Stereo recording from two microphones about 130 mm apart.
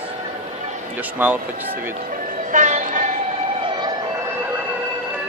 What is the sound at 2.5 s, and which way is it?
Train, 75° right (ahead or behind).